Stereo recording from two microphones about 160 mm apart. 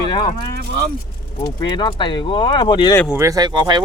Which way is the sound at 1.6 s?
30° left (ahead or behind).